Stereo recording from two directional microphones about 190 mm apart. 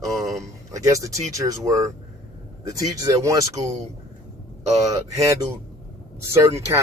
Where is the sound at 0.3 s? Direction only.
15° right (ahead or behind).